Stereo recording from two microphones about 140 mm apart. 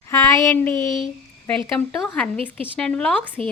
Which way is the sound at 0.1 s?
20° left (ahead or behind).